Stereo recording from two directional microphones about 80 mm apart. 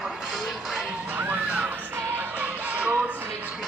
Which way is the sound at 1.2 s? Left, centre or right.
Right.